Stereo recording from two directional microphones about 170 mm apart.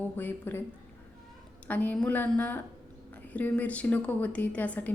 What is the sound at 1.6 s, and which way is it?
A woman's voice, 10° left (ahead or behind).